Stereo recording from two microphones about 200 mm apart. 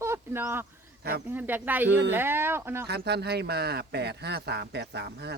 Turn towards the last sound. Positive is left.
turn(degrees=-55)  # may be behind; listen again after turning